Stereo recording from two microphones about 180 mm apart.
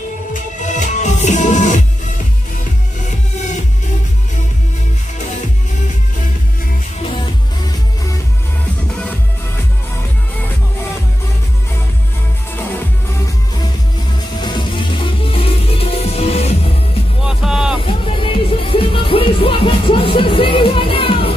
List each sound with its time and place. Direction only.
0.3 s music: 40° left (ahead or behind)
14.4 s music: 25° left (ahead or behind)
17.2 s music: 5° right (ahead or behind)
17.8 s music: 30° left (ahead or behind)